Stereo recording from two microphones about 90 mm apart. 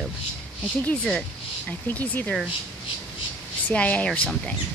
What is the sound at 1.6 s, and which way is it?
Speech, 15° left (ahead or behind).